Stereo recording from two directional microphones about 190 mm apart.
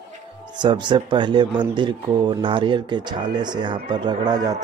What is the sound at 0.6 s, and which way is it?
Speech, 25° right (ahead or behind).